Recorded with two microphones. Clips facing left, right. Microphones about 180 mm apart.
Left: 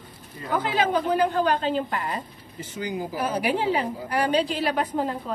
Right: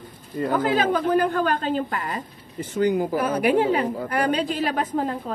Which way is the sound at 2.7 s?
65° right (ahead or behind).